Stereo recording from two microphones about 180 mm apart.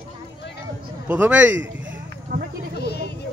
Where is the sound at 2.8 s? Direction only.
65° left (ahead or behind).